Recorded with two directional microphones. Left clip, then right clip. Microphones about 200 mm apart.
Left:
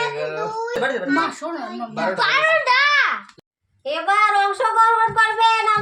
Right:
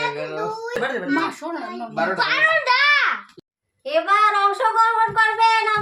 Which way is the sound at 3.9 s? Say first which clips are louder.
Even; 20° right (ahead or behind).